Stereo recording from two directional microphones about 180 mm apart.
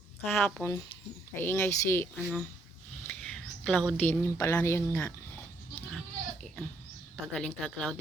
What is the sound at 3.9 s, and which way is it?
A woman's voice, 10° left (ahead or behind).